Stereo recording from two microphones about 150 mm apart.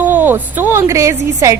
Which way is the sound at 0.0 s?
10° right (ahead or behind).